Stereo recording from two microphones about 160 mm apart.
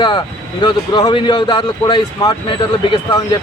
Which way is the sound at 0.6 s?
30° left (ahead or behind).